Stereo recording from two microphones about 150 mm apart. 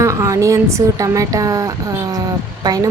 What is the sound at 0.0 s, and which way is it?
A woman's voice, 20° right (ahead or behind).